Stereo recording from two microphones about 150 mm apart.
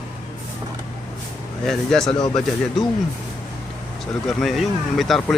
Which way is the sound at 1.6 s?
5° left (ahead or behind).